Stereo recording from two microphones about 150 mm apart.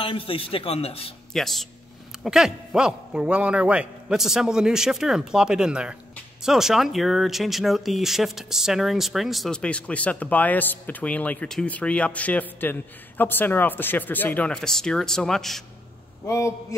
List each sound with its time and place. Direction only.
0.0 s a man's voice: 35° left (ahead or behind)
1.3 s speech: centre (ahead or behind)
16.3 s a man's voice: 20° left (ahead or behind)